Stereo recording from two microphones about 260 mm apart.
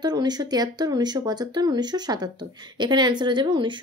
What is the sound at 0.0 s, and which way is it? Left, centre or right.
Speech, centre.